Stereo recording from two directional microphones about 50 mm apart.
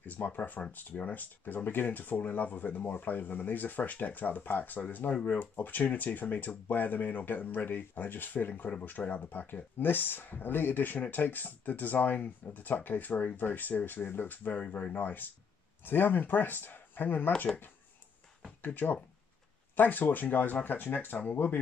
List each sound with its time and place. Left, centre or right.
0.2 s speech: left
5.1 s speech: left
5.4 s speech: left
14.6 s speech: left
15.0 s speech: left
18.6 s speech: left